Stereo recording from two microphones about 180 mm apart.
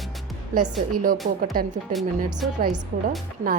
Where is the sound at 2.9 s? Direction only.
55° right (ahead or behind).